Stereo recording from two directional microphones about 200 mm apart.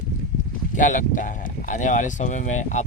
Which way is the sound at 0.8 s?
40° left (ahead or behind).